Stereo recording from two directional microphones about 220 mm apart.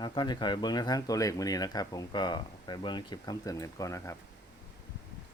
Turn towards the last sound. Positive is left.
turn(degrees=15)  # may be behind; listen again after turning